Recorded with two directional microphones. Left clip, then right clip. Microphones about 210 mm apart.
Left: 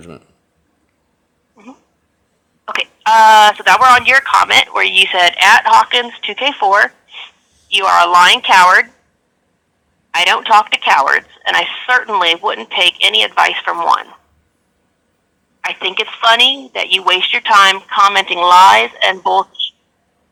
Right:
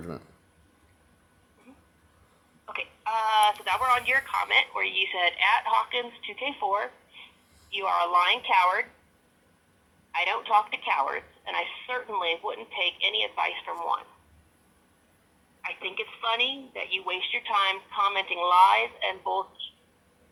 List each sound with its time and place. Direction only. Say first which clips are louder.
2.6 s speech: left 18 dB; 50° left (ahead or behind)
10.1 s speech: left 15 dB; 50° left (ahead or behind)
15.6 s speech: left 16 dB; 50° left (ahead or behind)